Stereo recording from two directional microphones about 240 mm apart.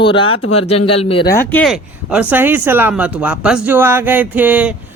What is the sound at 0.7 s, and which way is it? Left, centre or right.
Speech, left.